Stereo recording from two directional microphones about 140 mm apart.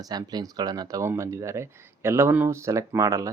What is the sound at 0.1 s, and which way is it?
Speech, 30° right (ahead or behind).